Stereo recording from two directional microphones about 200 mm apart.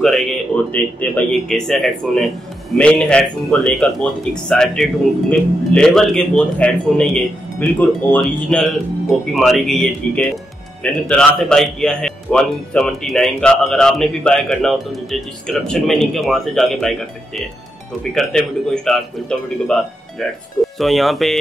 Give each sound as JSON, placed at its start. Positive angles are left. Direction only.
{"t": 0.0, "sound": "speech", "side_deg": 0}
{"t": 18.1, "sound": "speech", "side_deg": 5}